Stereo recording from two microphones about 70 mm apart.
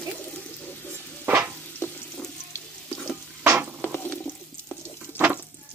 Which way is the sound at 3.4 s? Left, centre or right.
Right.